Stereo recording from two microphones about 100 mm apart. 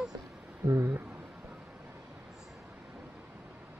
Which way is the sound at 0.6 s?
25° right (ahead or behind).